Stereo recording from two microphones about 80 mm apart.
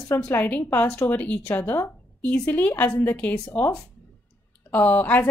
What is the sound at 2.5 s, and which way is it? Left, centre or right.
A woman's voice, left.